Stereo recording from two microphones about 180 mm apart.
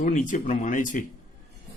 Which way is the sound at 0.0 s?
45° left (ahead or behind).